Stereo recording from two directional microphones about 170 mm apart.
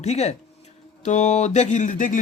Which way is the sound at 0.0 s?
40° left (ahead or behind).